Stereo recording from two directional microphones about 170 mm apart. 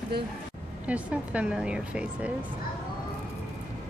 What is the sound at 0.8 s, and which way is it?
A woman's voice, 5° right (ahead or behind).